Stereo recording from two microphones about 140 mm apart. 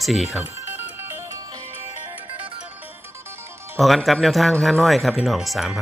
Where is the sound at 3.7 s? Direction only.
Centre (ahead or behind).